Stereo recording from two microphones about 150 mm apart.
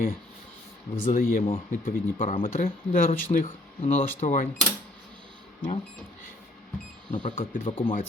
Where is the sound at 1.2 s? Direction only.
70° left (ahead or behind).